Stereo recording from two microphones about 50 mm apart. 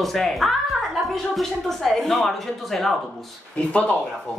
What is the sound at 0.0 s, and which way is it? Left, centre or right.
A woman's voice, centre.